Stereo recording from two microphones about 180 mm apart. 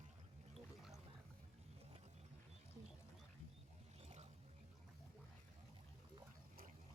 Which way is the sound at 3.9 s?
35° right (ahead or behind).